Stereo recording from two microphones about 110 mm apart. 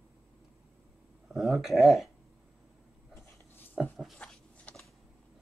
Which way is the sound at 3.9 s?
Centre (ahead or behind).